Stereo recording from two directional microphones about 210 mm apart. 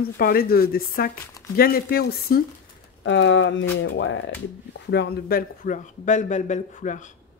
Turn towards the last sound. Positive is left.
turn(degrees=35)  # may be behind; listen again after turning